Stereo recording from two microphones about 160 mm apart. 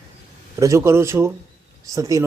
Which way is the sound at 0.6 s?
20° right (ahead or behind).